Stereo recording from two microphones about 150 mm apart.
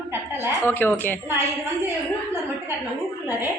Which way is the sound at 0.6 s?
15° left (ahead or behind).